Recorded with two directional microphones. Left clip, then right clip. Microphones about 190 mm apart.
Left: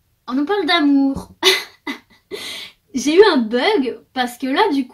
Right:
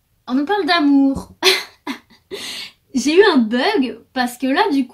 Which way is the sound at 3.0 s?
35° right (ahead or behind).